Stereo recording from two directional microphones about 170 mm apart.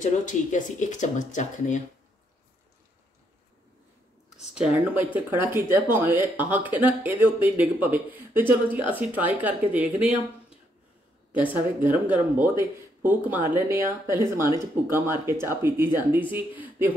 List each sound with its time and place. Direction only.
0.0 s speech: 50° left (ahead or behind)
4.6 s speech: 10° right (ahead or behind)
11.3 s speech: 10° right (ahead or behind)
14.1 s speech: 20° left (ahead or behind)
14.9 s speech: 15° right (ahead or behind)